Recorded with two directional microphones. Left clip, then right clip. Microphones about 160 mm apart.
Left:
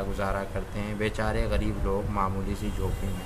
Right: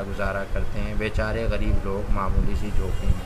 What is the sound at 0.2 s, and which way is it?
A man's voice, 25° left (ahead or behind).